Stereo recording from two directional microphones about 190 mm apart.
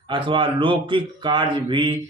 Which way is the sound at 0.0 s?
25° right (ahead or behind).